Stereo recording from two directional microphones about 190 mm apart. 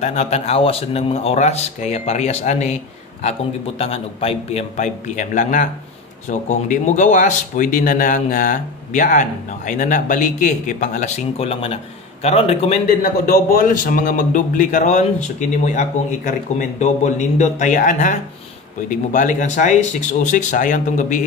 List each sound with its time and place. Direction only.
0.0 s speech: 35° left (ahead or behind)
13.5 s speech: 50° left (ahead or behind)